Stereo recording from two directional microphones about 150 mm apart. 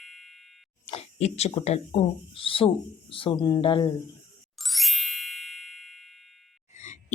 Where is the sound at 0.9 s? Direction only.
45° left (ahead or behind).